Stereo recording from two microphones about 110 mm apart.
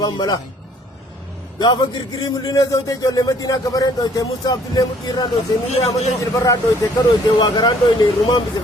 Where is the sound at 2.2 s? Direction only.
35° left (ahead or behind).